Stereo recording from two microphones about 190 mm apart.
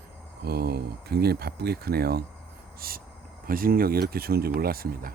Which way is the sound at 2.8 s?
50° right (ahead or behind).